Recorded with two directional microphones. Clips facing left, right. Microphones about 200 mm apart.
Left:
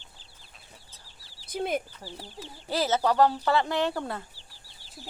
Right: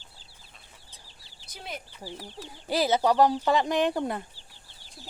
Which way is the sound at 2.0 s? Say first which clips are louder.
Right 2 dB; 15° right (ahead or behind).